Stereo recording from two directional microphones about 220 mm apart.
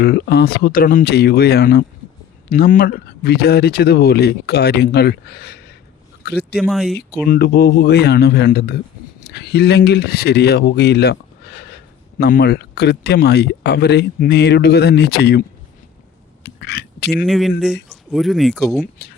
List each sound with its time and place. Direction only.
0.0 s speech: 45° left (ahead or behind)
6.6 s speech: centre (ahead or behind)
7.3 s speech: 45° left (ahead or behind)
16.4 s a sound: 50° left (ahead or behind)
17.2 s speech: centre (ahead or behind)